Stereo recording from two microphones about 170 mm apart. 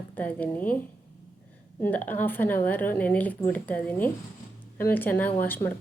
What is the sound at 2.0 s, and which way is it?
A woman's voice, 10° left (ahead or behind).